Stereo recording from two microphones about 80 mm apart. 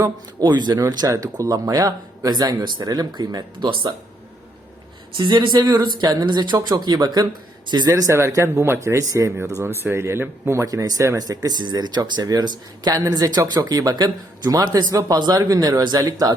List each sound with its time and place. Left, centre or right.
0.0 s speech: right
0.8 s speech: right
5.1 s speech: right
7.9 s speech: right
11.4 s speech: right
12.2 s speech: right